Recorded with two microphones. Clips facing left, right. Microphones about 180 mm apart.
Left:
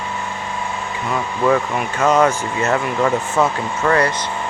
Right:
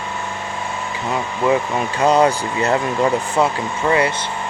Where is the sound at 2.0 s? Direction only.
35° right (ahead or behind).